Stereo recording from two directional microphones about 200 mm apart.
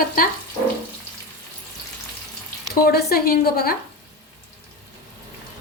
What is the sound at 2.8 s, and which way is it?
Speech, 50° left (ahead or behind).